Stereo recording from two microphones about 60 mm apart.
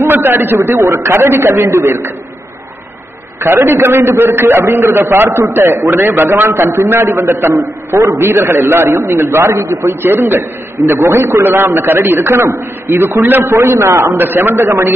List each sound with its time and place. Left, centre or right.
0.0 s a man's voice: right
0.7 s a man's voice: right
3.6 s a man's voice: right
8.0 s a man's voice: right
8.3 s a man's voice: right
14.1 s a man's voice: right